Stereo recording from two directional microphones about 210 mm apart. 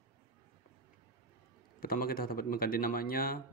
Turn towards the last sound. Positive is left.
turn(degrees=45)  # may be behind; listen again after turning